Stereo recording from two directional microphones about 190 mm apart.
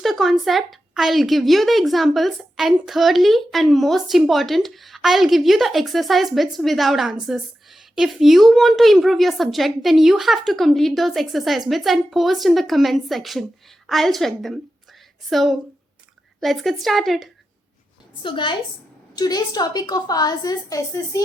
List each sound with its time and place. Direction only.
0.0 s speech: centre (ahead or behind)
18.2 s a woman's voice: 25° left (ahead or behind)